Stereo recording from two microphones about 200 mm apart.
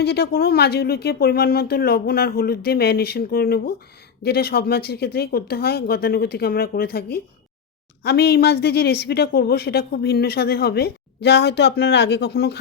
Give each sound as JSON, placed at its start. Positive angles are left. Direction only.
{"t": 0.0, "sound": "a woman's voice", "side_deg": 55}